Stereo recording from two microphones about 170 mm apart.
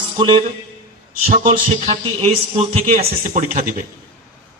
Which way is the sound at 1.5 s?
35° right (ahead or behind).